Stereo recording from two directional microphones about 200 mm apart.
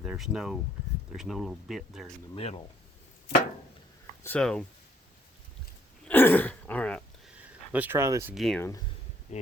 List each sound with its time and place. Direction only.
0.0 s speech: 5° right (ahead or behind)
2.3 s speech: 30° left (ahead or behind)
4.2 s speech: 5° left (ahead or behind)
6.1 s throat clearing: 10° left (ahead or behind)
7.3 s speech: 10° right (ahead or behind)
8.4 s speech: centre (ahead or behind)
9.3 s speech: 35° left (ahead or behind)